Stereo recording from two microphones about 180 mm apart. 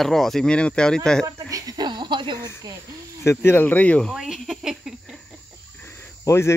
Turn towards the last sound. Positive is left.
turn(degrees=15)  # may be behind; listen again after turning